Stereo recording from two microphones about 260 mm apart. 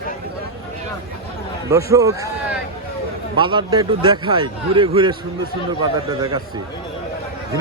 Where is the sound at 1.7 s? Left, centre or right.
Centre.